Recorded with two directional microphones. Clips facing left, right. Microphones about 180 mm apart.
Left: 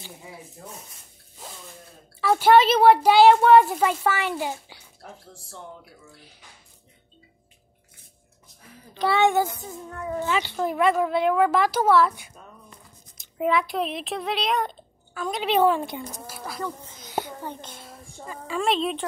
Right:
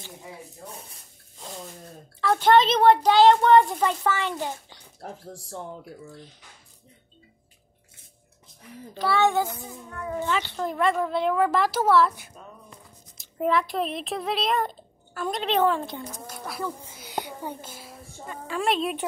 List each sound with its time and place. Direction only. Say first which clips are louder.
1.4 s a sound: right 2 dB; 5° left (ahead or behind)
2.1 s a child's voice: left 2 dB; 10° left (ahead or behind)
5.0 s speech: right 5 dB; 45° right (ahead or behind)
8.9 s a child's voice: left 2 dB; 20° left (ahead or behind)
10.0 s speech: left 1 dB; 5° left (ahead or behind)
15.4 s a child's voice: left 3 dB; 10° left (ahead or behind); by 19.0 s 5° right (ahead or behind)